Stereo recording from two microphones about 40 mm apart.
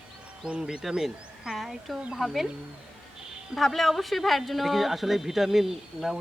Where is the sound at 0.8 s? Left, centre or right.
Centre.